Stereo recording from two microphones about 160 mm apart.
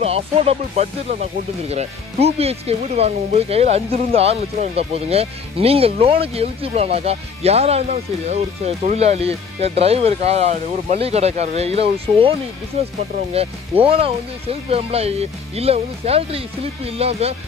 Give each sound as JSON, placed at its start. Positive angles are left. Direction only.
{"t": 0.0, "sound": "speech", "side_deg": -40}